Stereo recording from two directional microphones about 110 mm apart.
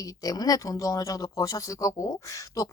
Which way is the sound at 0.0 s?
35° left (ahead or behind).